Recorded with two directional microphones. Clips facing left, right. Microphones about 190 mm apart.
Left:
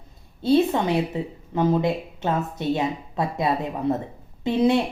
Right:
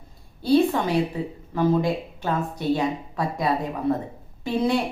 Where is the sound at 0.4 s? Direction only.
20° left (ahead or behind).